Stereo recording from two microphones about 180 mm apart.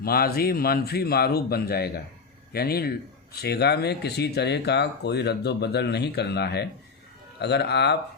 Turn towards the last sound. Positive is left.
turn(degrees=70)  # may be behind; listen again after turning